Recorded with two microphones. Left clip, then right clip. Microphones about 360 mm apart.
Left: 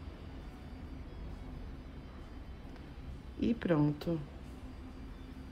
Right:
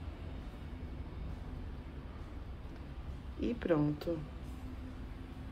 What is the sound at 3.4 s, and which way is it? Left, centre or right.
Speech, left.